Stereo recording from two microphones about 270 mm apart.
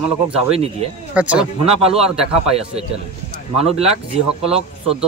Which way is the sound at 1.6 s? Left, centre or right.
Right.